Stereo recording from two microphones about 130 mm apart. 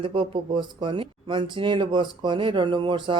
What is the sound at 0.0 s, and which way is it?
Speech, 40° right (ahead or behind).